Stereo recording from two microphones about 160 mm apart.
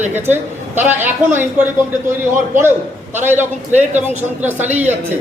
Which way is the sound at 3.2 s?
10° right (ahead or behind).